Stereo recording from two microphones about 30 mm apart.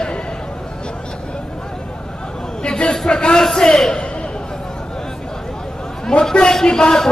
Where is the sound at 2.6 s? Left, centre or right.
Left.